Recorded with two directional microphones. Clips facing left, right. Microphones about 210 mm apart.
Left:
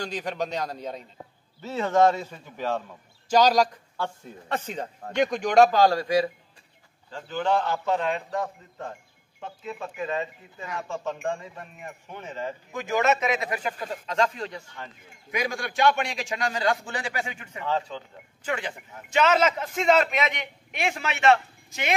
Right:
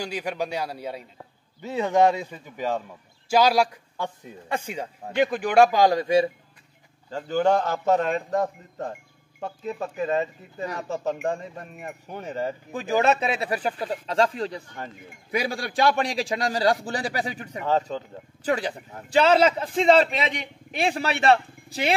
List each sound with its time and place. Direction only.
0.0 s a man's voice: 10° right (ahead or behind); by 6.3 s 25° right (ahead or behind)
7.1 s a man's voice: 40° right (ahead or behind)